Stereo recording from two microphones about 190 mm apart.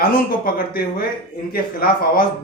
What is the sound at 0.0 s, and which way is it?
A man's voice, 50° left (ahead or behind).